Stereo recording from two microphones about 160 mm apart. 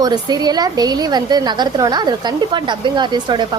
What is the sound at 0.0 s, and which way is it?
A woman's voice, 25° right (ahead or behind).